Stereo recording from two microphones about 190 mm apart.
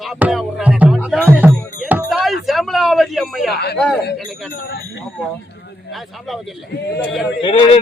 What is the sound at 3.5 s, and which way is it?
Speech, 60° left (ahead or behind).